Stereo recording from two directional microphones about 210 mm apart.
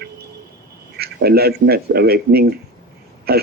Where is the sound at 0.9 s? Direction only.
50° right (ahead or behind).